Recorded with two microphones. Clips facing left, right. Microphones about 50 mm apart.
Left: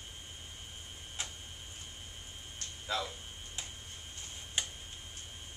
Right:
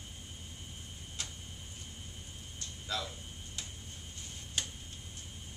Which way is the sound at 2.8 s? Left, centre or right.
Centre.